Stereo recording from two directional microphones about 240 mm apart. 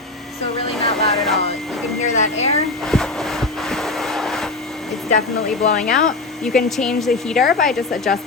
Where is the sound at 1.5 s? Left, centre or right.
Centre.